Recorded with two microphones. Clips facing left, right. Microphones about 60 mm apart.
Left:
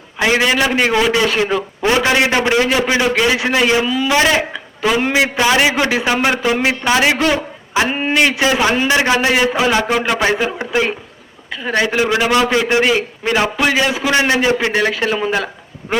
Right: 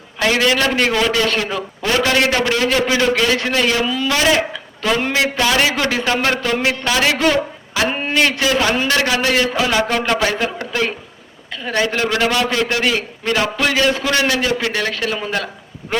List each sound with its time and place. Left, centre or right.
0.2 s a man's voice: centre
3.8 s a man's voice: centre
4.1 s a man's voice: left
4.5 s a man's voice: centre
7.2 s a sound: centre
7.9 s a man's voice: centre